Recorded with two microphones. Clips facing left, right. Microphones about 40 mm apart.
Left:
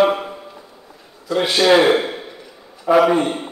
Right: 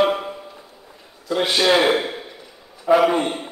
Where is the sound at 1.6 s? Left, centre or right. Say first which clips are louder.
Left 4 dB; centre.